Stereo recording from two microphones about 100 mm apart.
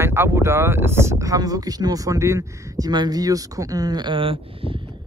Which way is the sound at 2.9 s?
45° right (ahead or behind).